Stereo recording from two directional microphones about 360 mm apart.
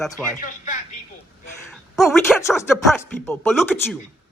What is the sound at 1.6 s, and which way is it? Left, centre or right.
Speech, centre.